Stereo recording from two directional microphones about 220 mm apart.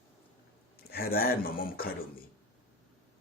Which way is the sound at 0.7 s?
45° left (ahead or behind).